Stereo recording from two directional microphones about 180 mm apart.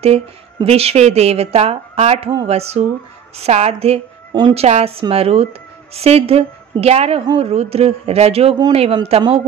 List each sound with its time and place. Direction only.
0.0 s speech: 35° right (ahead or behind)